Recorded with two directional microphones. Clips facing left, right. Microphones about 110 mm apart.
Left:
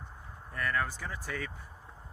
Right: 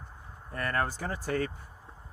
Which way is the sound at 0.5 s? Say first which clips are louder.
Right 2 dB; 45° right (ahead or behind).